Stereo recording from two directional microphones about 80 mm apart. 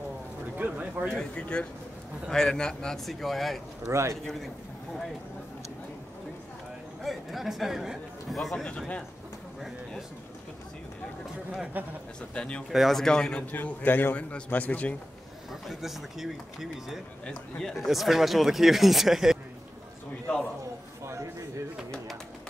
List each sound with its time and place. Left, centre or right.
0.6 s a sound: centre
1.1 s speech: centre
3.8 s speech: right
7.0 s speech: centre
8.6 s speech: centre
11.7 s a man's voice: right
12.4 s speech: centre
12.7 s speech: centre
13.5 s a man's voice: left
15.6 s speech: centre
17.3 s speech: centre
17.7 s speech: centre
21.0 s a sound: right